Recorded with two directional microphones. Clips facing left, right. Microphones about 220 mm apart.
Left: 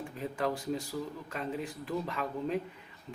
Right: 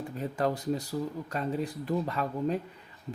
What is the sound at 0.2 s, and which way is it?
Speech, 40° right (ahead or behind).